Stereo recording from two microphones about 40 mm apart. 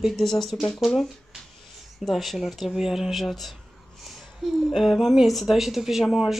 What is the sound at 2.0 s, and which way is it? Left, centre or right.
A child's voice, centre.